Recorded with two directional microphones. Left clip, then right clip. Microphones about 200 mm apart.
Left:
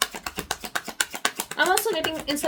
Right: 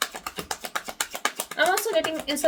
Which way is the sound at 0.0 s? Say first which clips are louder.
Left 2 dB; 25° left (ahead or behind).